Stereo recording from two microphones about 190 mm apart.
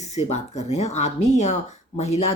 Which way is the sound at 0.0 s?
35° left (ahead or behind).